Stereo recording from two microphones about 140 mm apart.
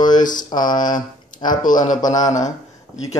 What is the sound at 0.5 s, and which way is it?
Speech, 30° left (ahead or behind).